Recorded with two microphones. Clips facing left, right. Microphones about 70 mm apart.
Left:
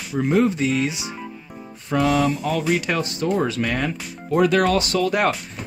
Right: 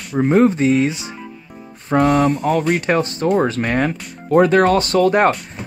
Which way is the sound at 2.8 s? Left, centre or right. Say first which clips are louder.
Right 6 dB; right.